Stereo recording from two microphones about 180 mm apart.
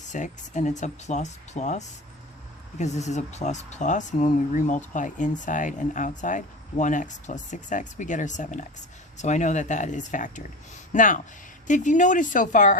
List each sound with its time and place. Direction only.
0.1 s speech: 40° left (ahead or behind)